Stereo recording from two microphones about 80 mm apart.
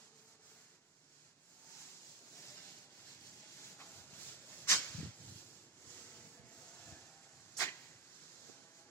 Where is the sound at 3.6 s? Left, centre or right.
Left.